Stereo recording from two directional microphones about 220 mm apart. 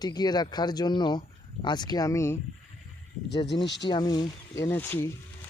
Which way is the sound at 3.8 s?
20° left (ahead or behind).